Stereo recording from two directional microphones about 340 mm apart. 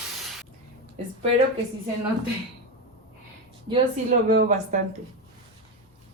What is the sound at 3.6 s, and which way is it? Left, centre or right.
Speech, right.